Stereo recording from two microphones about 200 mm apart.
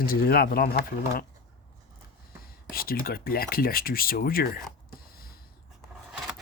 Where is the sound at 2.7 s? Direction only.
45° left (ahead or behind).